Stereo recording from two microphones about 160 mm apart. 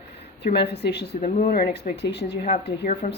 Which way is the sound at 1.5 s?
85° left.